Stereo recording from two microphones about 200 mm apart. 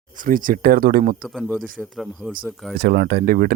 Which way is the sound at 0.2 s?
45° right (ahead or behind).